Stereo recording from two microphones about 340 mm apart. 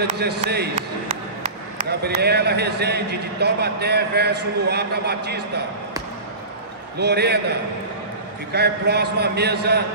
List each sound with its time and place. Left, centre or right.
0.2 s speech: right
7.0 s speech: right
8.5 s speech: right